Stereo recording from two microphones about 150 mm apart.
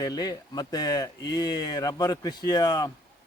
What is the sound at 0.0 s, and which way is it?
A man's voice, 25° left (ahead or behind).